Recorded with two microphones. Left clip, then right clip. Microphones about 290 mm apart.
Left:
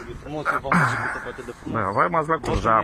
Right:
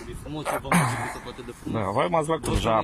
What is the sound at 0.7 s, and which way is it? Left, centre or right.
Speech, right.